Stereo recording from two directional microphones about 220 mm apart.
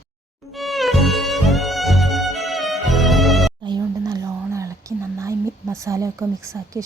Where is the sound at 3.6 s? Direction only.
20° right (ahead or behind).